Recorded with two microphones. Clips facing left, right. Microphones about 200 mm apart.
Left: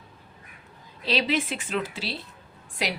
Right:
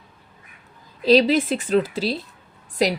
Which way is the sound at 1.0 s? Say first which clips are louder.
Right 10 dB; 40° right (ahead or behind).